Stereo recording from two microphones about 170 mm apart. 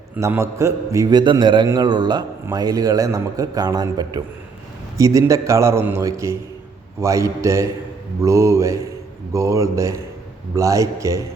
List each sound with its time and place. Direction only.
0.2 s a man's voice: 15° right (ahead or behind)